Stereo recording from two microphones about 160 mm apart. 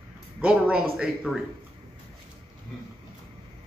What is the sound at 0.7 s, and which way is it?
Speech, 5° right (ahead or behind).